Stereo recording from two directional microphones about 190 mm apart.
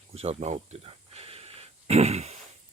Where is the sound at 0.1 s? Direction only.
35° right (ahead or behind).